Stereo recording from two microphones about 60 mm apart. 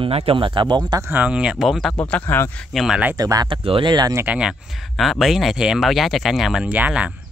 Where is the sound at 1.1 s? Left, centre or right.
Right.